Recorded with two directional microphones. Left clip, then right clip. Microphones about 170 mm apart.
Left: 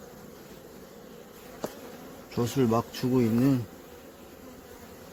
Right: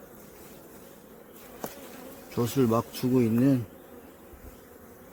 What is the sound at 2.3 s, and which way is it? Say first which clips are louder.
Speech: right 1 dB; 25° right (ahead or behind).